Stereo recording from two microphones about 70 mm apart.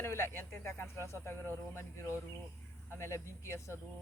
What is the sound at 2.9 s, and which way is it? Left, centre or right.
Speech, left.